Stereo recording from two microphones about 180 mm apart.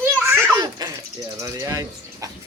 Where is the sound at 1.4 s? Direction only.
15° right (ahead or behind).